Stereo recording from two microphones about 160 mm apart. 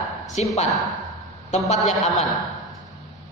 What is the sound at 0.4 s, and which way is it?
A man's voice, 45° left (ahead or behind).